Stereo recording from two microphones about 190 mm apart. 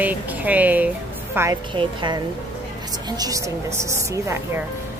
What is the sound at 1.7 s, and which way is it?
A woman's voice, 25° right (ahead or behind).